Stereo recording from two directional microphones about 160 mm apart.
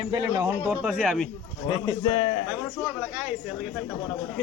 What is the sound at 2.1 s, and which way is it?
Speech, 40° left (ahead or behind).